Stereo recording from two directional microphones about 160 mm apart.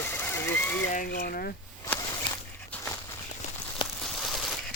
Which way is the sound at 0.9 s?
65° left (ahead or behind).